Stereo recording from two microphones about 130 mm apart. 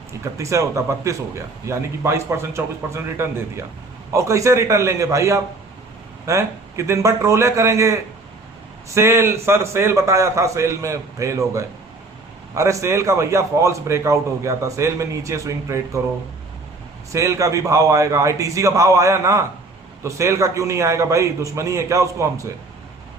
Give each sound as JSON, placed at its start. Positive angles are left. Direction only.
{"t": 0.3, "sound": "a man's voice", "side_deg": -25}
{"t": 9.0, "sound": "a man's voice", "side_deg": -20}
{"t": 17.1, "sound": "a man's voice", "side_deg": -25}